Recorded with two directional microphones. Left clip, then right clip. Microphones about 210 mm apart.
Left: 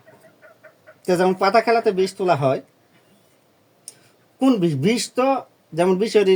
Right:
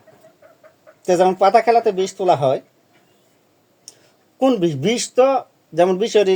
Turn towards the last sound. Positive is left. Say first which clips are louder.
# right 2 dB
turn(degrees=5)  # may be behind; listen again after turning